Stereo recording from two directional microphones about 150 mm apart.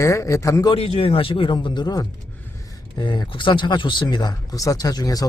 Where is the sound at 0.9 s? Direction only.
35° left (ahead or behind).